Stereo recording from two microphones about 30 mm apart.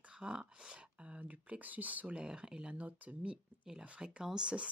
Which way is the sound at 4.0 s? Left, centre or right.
Right.